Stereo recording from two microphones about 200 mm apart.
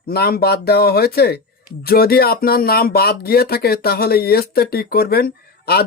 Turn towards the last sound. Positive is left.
turn(degrees=50)  # may be behind; listen again after turning